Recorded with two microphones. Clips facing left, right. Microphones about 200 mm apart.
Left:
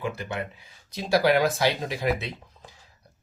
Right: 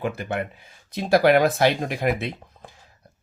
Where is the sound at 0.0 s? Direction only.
55° right (ahead or behind).